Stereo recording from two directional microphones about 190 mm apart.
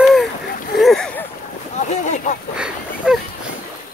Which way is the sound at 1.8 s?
40° left (ahead or behind).